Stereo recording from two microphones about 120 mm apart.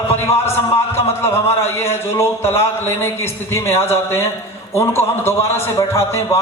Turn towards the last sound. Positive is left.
turn(degrees=25)  # may be behind; listen again after turning